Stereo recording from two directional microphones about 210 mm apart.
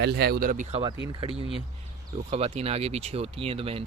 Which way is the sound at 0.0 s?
50° right (ahead or behind).